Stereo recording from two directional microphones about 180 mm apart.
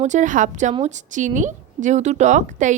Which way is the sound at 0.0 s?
45° right (ahead or behind).